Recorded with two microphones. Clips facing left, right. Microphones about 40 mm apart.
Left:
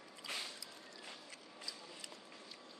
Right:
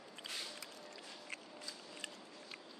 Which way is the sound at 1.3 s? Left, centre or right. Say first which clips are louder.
Right 2 dB; right.